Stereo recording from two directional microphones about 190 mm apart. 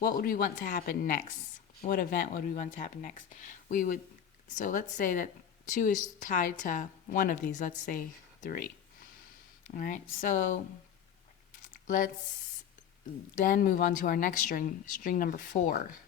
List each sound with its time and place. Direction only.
0.2 s speech: 50° left (ahead or behind)
7.9 s a sound: 45° left (ahead or behind)
9.7 s speech: 45° left (ahead or behind)
11.9 s speech: 45° left (ahead or behind)
13.3 s speech: 50° left (ahead or behind)